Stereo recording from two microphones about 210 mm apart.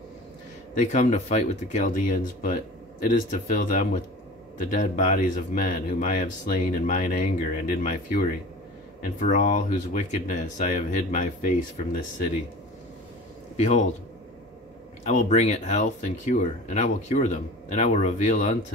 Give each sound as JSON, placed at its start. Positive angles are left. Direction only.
{"t": 0.7, "sound": "speech", "side_deg": 35}
{"t": 13.6, "sound": "speech", "side_deg": 35}
{"t": 15.0, "sound": "speech", "side_deg": 35}